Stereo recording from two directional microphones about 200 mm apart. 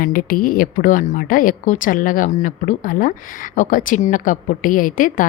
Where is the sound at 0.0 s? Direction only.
45° left (ahead or behind).